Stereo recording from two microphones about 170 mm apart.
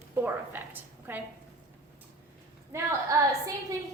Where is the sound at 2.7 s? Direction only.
20° right (ahead or behind).